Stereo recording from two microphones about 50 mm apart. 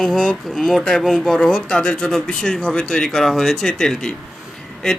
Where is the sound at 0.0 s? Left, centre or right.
Centre.